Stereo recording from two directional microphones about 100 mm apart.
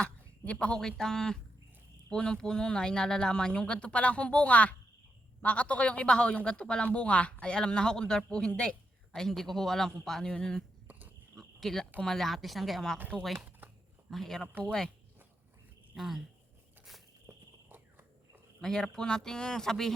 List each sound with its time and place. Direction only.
0.0 s speech: 10° left (ahead or behind)
11.3 s cricket: 5° left (ahead or behind)
11.9 s speech: 5° left (ahead or behind)
16.0 s speech: centre (ahead or behind)
17.2 s a sound: 20° right (ahead or behind)
18.6 s speech: 5° left (ahead or behind)